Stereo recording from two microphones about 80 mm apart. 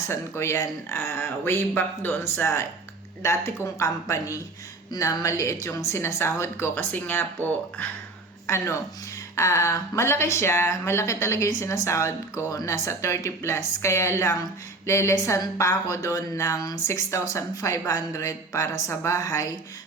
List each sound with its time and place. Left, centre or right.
0.1 s speech: left
4.1 s speech: left
8.4 s speech: left